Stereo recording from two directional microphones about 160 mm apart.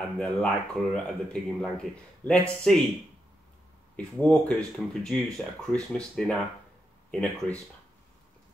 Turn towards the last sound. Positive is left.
turn(degrees=10)  # may be behind; listen again after turning